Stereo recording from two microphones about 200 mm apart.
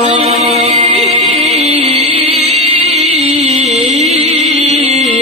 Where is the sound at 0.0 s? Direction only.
30° right (ahead or behind).